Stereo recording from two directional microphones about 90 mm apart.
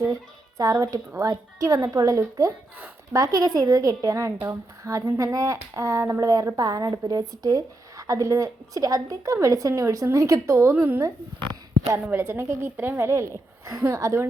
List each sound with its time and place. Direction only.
0.0 s a woman's voice: 40° right (ahead or behind)